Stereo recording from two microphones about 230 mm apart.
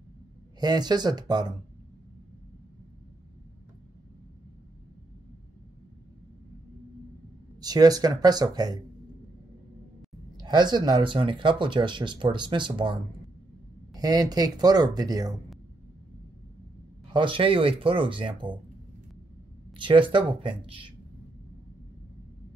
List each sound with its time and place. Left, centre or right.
0.6 s speech: centre
7.6 s speech: centre
10.3 s speech: centre
13.9 s speech: centre
17.1 s speech: right
19.8 s speech: right